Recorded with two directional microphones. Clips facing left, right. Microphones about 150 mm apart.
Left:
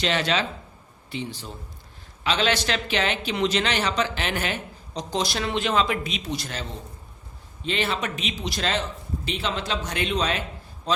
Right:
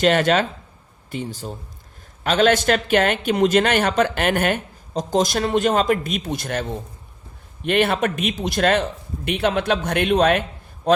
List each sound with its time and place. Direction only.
0.0 s a man's voice: 50° right (ahead or behind)